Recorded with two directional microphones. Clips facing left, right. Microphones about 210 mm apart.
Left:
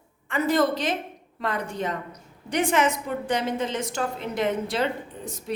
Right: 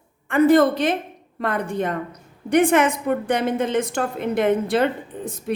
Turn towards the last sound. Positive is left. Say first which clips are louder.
# right 6 dB
turn(degrees=-55)  # may be behind; listen again after turning